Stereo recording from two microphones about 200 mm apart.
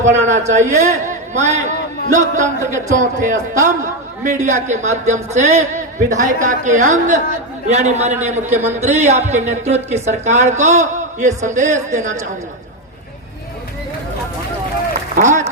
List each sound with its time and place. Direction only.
0.0 s a woman's voice: 35° right (ahead or behind)
15.1 s a man's voice: 40° right (ahead or behind)